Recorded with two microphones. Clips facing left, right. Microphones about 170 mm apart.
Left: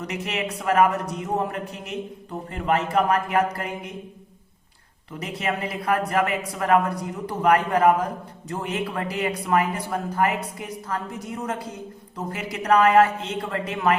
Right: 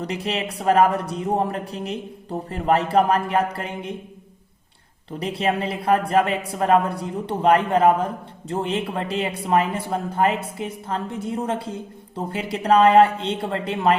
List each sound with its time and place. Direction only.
0.0 s a man's voice: 30° right (ahead or behind)
5.2 s a woman's voice: 30° right (ahead or behind)